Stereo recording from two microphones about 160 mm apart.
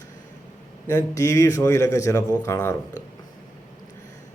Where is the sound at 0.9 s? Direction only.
20° left (ahead or behind).